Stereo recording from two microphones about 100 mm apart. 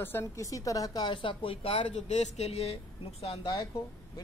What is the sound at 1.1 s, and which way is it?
Speech, 60° left (ahead or behind).